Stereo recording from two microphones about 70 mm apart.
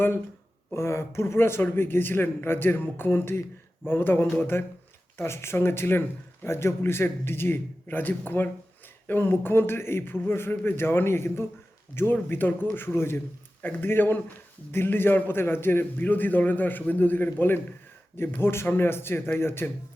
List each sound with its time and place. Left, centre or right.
0.7 s a man's voice: left